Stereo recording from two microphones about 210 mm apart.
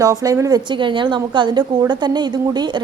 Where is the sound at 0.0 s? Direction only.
15° right (ahead or behind).